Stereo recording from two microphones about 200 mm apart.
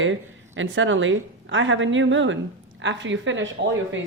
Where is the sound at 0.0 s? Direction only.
70° right (ahead or behind).